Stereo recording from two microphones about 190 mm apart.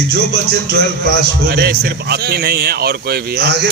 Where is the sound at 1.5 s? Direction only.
55° right (ahead or behind).